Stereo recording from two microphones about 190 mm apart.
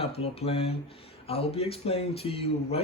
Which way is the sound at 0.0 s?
30° left (ahead or behind).